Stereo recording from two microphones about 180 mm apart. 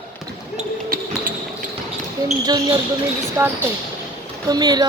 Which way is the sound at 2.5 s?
20° right (ahead or behind).